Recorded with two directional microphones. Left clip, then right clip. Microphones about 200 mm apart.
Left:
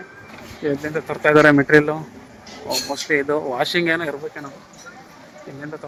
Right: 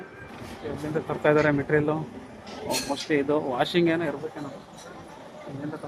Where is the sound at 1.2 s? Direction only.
25° left (ahead or behind).